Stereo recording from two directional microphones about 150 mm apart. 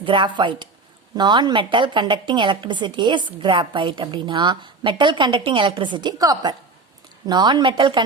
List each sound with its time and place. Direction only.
0.0 s a woman's voice: 35° right (ahead or behind)